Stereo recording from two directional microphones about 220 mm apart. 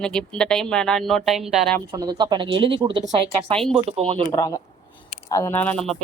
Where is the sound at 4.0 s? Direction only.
25° right (ahead or behind).